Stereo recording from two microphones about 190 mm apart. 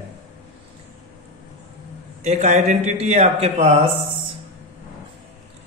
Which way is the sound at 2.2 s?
35° right (ahead or behind).